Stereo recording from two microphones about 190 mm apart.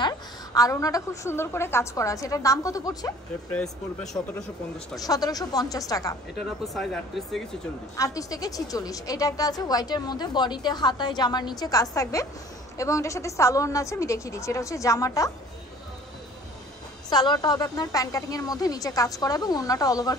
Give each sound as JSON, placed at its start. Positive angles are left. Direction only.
{"t": 0.6, "sound": "a woman's voice", "side_deg": 20}
{"t": 3.5, "sound": "speech", "side_deg": 0}
{"t": 4.9, "sound": "a woman's voice", "side_deg": 20}
{"t": 6.6, "sound": "speech", "side_deg": 0}
{"t": 7.9, "sound": "a woman's voice", "side_deg": 15}
{"t": 17.1, "sound": "a woman's voice", "side_deg": 20}